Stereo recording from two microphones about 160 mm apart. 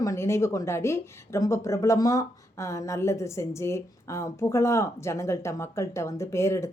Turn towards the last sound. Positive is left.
turn(degrees=15)  # may be behind; listen again after turning